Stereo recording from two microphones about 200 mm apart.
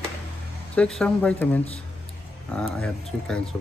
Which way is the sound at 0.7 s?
5° left (ahead or behind).